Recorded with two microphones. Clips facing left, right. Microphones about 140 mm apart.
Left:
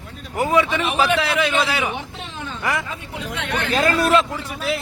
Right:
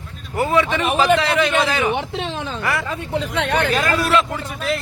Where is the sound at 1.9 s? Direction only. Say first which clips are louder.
Right 8 dB; 80° right.